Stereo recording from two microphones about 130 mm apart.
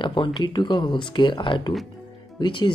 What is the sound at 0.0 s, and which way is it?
Speech, 40° left (ahead or behind).